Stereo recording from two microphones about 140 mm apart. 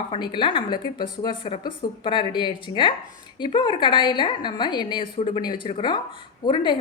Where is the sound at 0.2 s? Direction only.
35° left (ahead or behind).